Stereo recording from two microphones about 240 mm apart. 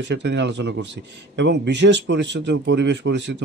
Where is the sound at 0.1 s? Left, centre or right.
Right.